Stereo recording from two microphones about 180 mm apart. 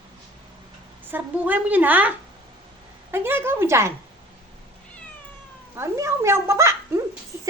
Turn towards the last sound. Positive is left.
turn(degrees=-15)  # may be behind; listen again after turning